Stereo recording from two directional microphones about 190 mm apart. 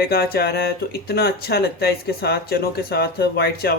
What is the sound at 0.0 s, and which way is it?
Speech, 55° left (ahead or behind).